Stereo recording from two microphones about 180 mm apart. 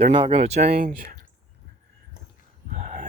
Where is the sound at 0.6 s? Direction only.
55° right (ahead or behind).